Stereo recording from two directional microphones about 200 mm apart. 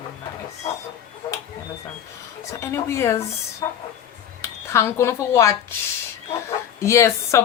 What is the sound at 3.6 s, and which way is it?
Train, 20° left (ahead or behind).